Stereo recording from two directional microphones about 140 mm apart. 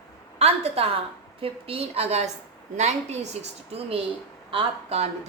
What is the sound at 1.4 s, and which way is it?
Speech, 45° right (ahead or behind).